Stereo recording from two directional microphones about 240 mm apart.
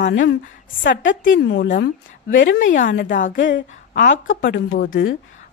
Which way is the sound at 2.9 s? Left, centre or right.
Left.